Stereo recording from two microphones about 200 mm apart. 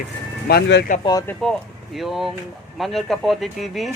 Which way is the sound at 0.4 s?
55° left (ahead or behind).